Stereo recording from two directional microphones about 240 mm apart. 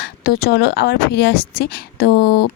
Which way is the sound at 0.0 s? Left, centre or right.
Left.